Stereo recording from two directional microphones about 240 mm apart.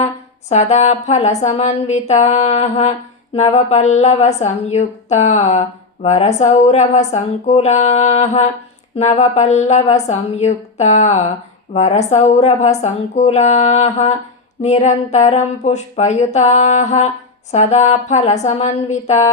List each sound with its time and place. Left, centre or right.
0.0 s a woman's voice: left